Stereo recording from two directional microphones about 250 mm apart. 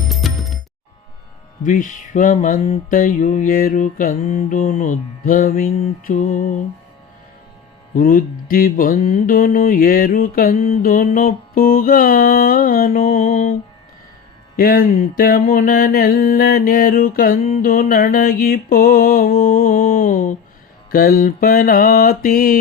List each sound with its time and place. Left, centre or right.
0.1 s coin: centre
1.6 s mantra: left
7.9 s mantra: left